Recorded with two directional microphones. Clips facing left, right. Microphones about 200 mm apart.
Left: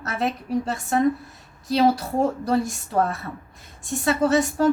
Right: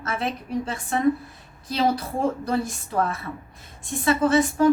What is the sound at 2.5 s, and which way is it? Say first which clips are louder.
A woman's voice: left 3 dB; 40° left (ahead or behind).